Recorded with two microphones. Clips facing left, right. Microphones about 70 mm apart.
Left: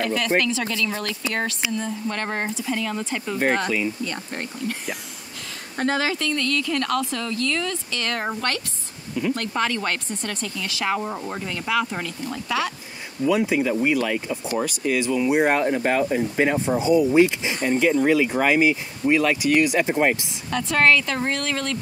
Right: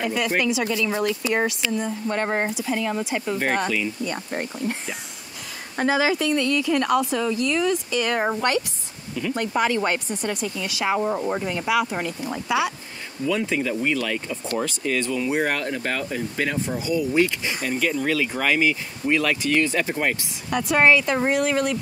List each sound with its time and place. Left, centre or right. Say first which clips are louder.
0.0 s a woman's voice: left 1 dB; centre
5.8 s a woman's voice: right 2 dB; centre
13.3 s speech: left 3 dB; centre
20.4 s a woman's voice: right 1 dB; centre